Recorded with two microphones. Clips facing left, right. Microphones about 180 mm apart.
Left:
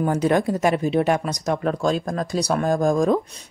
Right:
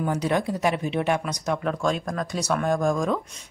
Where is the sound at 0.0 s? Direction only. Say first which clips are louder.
Left 5 dB; 45° left (ahead or behind).